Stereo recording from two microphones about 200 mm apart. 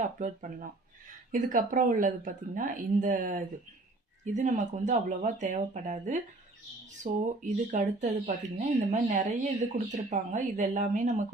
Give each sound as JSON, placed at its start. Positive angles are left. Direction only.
{"t": 0.2, "sound": "speech", "side_deg": -40}